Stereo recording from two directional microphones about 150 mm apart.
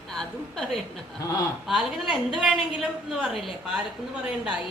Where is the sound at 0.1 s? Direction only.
5° left (ahead or behind).